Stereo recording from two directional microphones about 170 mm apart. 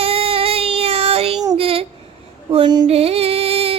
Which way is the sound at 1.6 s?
35° right (ahead or behind).